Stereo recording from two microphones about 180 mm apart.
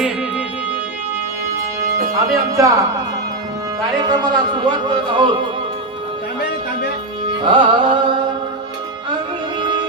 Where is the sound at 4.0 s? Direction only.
25° right (ahead or behind).